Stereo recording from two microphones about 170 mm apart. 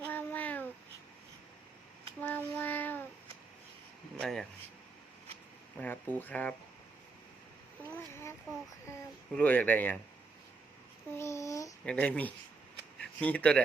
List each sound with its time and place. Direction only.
0.0 s child singing: 10° left (ahead or behind)
2.2 s child singing: 10° left (ahead or behind)
4.2 s speech: centre (ahead or behind)
5.7 s speech: 10° left (ahead or behind)
7.9 s a sound: 15° left (ahead or behind)
9.3 s speech: 10° left (ahead or behind)
11.2 s speech: 15° left (ahead or behind)
11.9 s speech: 5° left (ahead or behind)